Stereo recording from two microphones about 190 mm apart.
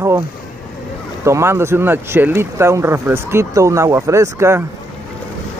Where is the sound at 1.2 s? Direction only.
15° right (ahead or behind).